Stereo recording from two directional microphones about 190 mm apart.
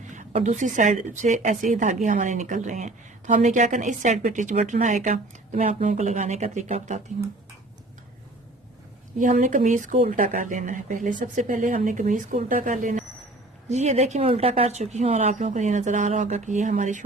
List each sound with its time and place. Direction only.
0.1 s a woman's voice: 40° right (ahead or behind)
9.1 s a woman's voice: 40° right (ahead or behind)